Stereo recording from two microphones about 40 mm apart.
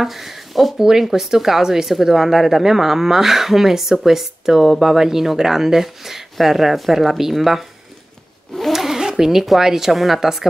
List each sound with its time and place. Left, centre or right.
0.0 s speech: centre
0.7 s a woman's voice: centre
8.7 s speech: centre